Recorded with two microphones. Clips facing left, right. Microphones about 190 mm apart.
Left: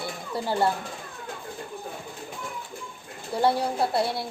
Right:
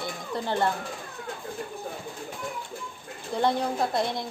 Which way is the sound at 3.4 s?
10° left (ahead or behind).